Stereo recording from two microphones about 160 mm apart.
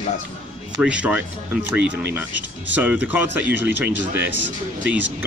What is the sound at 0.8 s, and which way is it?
Speech, 5° right (ahead or behind).